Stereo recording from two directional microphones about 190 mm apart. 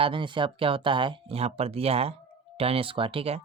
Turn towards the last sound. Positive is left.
turn(degrees=-30)  # may be behind; listen again after turning